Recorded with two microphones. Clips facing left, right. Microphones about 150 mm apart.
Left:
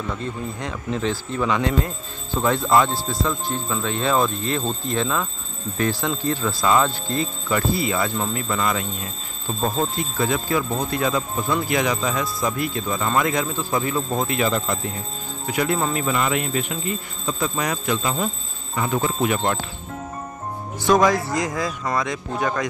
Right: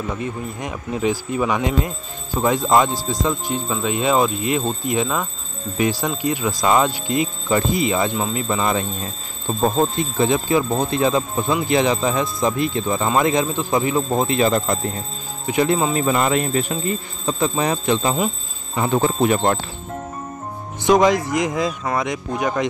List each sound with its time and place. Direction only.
0.1 s speech: 15° right (ahead or behind); by 19.5 s 35° right (ahead or behind)
20.8 s speech: 20° right (ahead or behind)